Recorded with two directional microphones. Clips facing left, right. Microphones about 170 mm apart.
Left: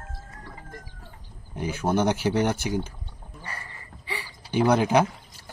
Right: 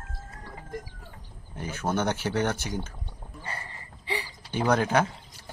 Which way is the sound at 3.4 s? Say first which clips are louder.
Right 1 dB; 25° right (ahead or behind).